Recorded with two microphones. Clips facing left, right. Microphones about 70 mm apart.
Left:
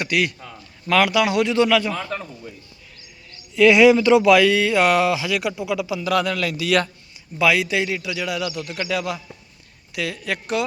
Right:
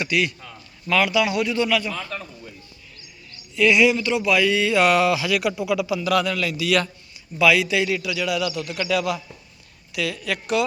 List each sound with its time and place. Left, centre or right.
0.0 s a man's voice: left
0.9 s a man's voice: left
1.9 s a man's voice: left
4.2 s speech: left
4.5 s a man's voice: left
6.2 s a man's voice: left